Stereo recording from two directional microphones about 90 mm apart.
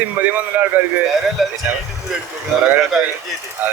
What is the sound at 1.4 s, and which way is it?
Speech, centre (ahead or behind).